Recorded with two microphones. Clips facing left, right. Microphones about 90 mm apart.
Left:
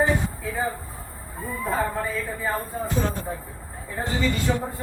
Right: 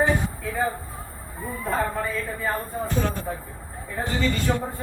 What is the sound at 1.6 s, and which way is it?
Speech, 15° left (ahead or behind).